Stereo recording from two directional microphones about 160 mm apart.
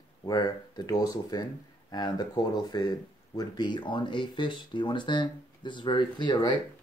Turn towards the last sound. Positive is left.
turn(degrees=30)  # may be behind; listen again after turning